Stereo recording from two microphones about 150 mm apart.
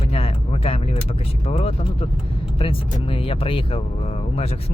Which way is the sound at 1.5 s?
40° left (ahead or behind).